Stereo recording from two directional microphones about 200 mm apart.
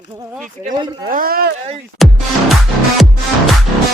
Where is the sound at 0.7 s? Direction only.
20° right (ahead or behind).